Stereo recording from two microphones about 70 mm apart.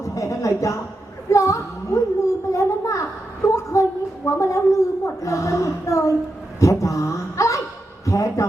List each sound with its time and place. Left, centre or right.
0.0 s a woman's voice: left